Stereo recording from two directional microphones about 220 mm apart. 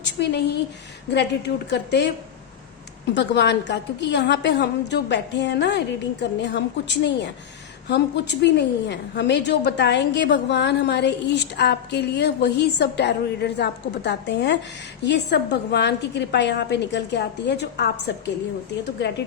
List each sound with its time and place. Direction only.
0.0 s a woman's voice: 50° left (ahead or behind)
3.2 s a woman's voice: 50° left (ahead or behind)